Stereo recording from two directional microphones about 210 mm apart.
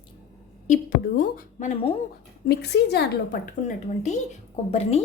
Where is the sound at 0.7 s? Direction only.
40° left (ahead or behind).